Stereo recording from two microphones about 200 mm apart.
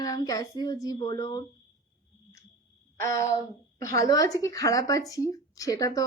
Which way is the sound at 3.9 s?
15° left (ahead or behind).